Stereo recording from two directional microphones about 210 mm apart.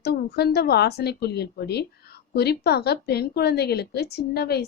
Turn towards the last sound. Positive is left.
turn(degrees=50)  # may be behind; listen again after turning